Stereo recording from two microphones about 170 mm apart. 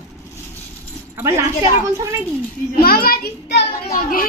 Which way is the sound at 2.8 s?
65° left (ahead or behind).